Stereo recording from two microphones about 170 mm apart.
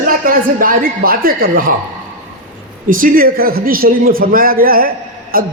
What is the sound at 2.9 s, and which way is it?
A man's voice, 55° right (ahead or behind).